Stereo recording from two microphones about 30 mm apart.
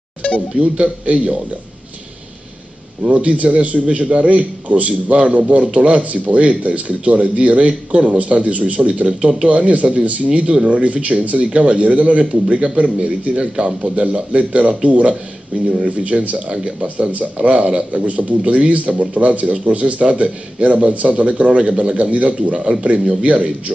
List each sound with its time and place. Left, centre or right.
0.6 s a man's voice: right
3.0 s speech: right
5.5 s a man's voice: right
13.4 s a man's voice: right
14.3 s speech: right
16.8 s speech: right
22.4 s a man's voice: right